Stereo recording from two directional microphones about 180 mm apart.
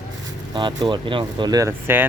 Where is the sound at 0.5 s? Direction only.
25° right (ahead or behind).